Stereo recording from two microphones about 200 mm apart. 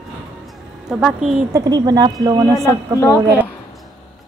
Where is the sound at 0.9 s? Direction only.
Centre (ahead or behind).